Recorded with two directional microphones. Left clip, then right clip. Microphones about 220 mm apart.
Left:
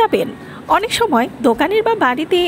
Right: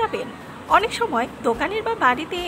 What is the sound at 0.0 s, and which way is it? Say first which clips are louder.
A woman's voice: left 9 dB; 30° left (ahead or behind).